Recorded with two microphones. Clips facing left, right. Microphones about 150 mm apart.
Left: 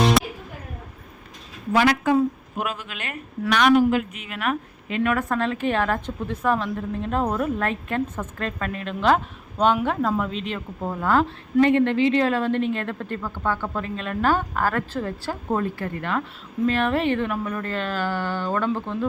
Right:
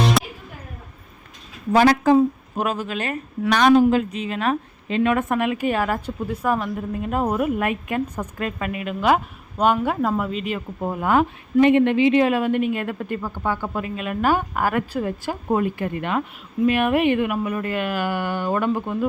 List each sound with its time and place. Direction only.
0.0 s music: centre (ahead or behind)
1.7 s a woman's voice: 40° right (ahead or behind)
5.3 s a woman's voice: 10° right (ahead or behind)